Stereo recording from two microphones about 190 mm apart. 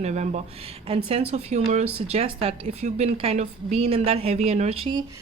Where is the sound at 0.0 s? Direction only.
40° right (ahead or behind).